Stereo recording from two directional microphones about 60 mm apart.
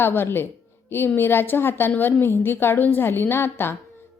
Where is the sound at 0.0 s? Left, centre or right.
Left.